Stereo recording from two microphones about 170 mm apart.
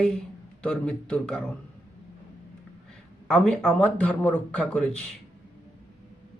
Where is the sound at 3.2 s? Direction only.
5° left (ahead or behind).